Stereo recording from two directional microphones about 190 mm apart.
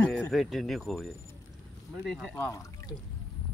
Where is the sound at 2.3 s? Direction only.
15° left (ahead or behind).